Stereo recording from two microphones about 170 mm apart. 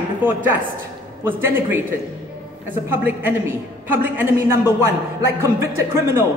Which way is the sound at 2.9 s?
10° right (ahead or behind).